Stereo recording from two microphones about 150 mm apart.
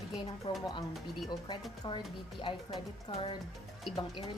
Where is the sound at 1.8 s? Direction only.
30° left (ahead or behind).